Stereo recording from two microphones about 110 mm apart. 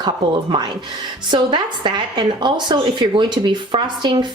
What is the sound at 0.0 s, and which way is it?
A woman's voice, 45° right (ahead or behind).